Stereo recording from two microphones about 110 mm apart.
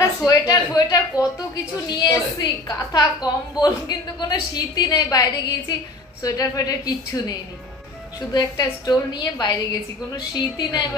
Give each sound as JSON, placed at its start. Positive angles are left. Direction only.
{"t": 0.0, "sound": "a woman's voice", "side_deg": 30}